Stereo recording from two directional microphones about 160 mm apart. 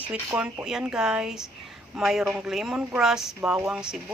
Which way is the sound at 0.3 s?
5° right (ahead or behind).